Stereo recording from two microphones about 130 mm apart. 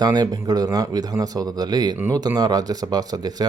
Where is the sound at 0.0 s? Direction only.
30° right (ahead or behind).